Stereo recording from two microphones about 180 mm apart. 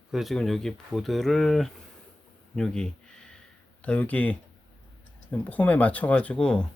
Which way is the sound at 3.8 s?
10° left (ahead or behind).